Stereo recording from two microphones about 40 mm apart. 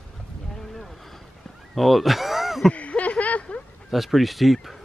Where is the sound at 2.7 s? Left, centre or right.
Left.